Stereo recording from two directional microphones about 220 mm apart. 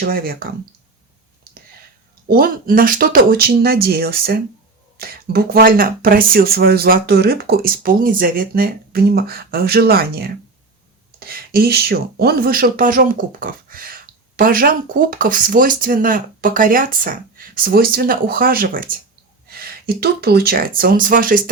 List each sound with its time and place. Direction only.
0.0 s speech: 40° right (ahead or behind)
2.2 s speech: 40° right (ahead or behind)